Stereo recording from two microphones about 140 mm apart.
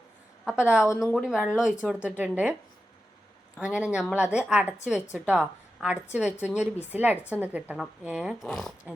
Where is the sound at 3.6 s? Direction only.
5° right (ahead or behind).